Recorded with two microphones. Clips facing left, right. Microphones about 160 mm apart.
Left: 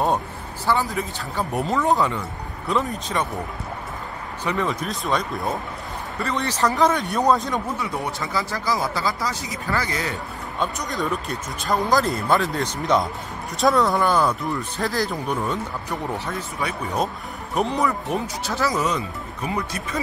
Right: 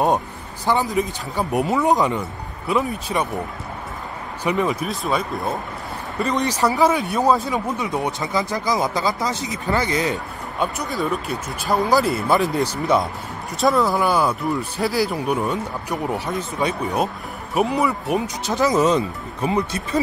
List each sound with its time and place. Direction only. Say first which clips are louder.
0.7 s speech: right 3 dB; 15° right (ahead or behind)
4.5 s speech: right 4 dB; 15° right (ahead or behind)
4.8 s speech: right 1 dB; centre (ahead or behind)
6.1 s speech: right 4 dB; 15° right (ahead or behind)
7.8 s speech: right 4 dB; 20° right (ahead or behind)
10.6 s speech: right 2 dB; 5° right (ahead or behind); by 16.7 s 20° right (ahead or behind)
17.6 s speech: right 2 dB; 10° right (ahead or behind); by 20.0 s 25° right (ahead or behind)